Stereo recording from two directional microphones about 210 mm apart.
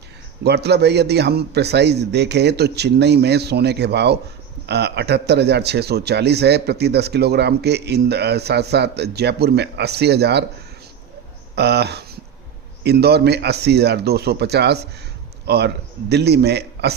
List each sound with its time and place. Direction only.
0.4 s a man's voice: 50° right (ahead or behind)
11.5 s a man's voice: 50° right (ahead or behind)